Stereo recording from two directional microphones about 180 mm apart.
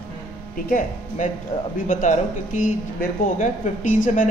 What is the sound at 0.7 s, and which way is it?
Speech, 45° left (ahead or behind).